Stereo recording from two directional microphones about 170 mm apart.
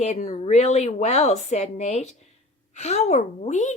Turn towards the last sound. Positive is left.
turn(degrees=45)  # may be behind; listen again after turning